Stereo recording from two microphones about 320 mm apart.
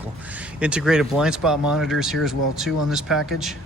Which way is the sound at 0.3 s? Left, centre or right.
Centre.